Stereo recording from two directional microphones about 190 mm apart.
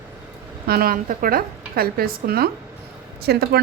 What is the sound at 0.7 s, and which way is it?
A woman's voice, 50° right (ahead or behind).